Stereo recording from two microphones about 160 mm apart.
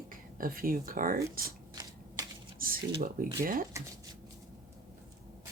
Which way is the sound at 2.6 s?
65° right (ahead or behind).